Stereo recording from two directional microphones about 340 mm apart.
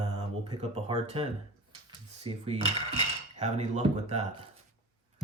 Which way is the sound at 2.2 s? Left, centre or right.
Centre.